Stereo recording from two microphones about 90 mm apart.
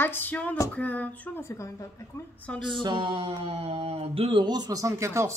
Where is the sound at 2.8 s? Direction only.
65° right (ahead or behind).